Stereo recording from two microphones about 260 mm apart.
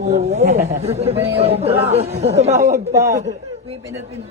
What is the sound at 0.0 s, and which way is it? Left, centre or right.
Speech, right.